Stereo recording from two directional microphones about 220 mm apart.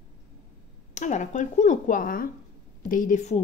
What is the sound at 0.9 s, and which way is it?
A woman's voice, 35° left (ahead or behind).